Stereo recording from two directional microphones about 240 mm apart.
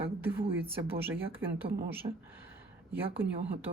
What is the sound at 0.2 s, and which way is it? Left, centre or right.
A woman's voice, centre.